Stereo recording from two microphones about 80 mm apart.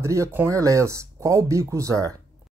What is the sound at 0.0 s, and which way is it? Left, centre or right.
Speech, right.